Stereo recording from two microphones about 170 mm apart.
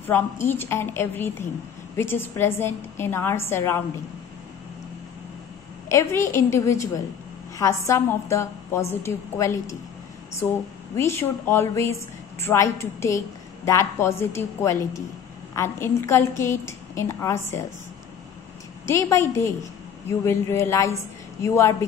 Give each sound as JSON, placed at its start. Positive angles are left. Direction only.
{"t": 0.0, "sound": "a woman's voice", "side_deg": 15}
{"t": 5.9, "sound": "a woman's voice", "side_deg": 15}
{"t": 18.9, "sound": "a woman's voice", "side_deg": 15}